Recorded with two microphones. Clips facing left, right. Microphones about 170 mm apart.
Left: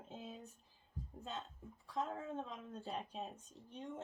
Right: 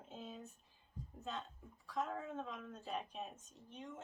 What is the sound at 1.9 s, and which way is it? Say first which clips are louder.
A woman's voice: even; 25° left (ahead or behind).